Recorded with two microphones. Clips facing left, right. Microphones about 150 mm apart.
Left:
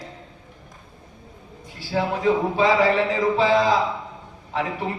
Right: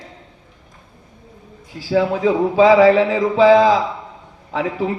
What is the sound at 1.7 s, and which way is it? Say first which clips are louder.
Speech: right 7 dB; 90° right.